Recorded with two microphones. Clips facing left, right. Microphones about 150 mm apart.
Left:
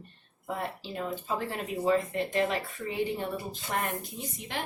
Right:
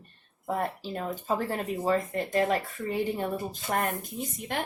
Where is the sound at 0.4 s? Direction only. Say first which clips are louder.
Right 4 dB; 40° right (ahead or behind).